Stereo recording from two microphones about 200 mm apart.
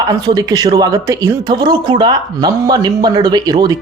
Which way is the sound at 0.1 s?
20° right (ahead or behind).